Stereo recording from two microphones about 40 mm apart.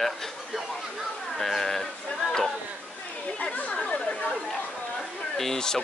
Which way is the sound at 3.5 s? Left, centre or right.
Left.